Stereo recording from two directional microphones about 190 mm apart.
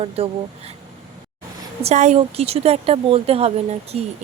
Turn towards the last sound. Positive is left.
turn(degrees=-35)  # may be behind; listen again after turning